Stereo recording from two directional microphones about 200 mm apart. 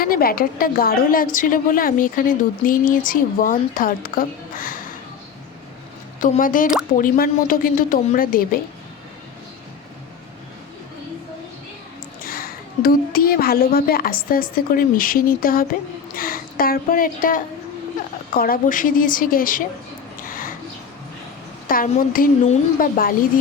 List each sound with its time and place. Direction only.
0.0 s a woman's voice: 45° left (ahead or behind)
6.1 s a woman's voice: 40° left (ahead or behind)
12.2 s a woman's voice: 45° left (ahead or behind)
20.2 s a sound: 45° left (ahead or behind)
21.7 s a woman's voice: 45° left (ahead or behind)